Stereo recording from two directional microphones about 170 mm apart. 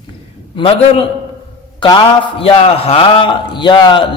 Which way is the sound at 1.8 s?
30° left (ahead or behind).